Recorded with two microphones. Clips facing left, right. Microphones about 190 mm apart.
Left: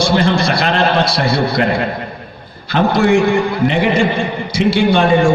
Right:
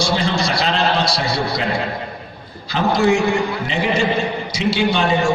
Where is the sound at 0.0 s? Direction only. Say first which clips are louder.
Left 5 dB; 55° left (ahead or behind).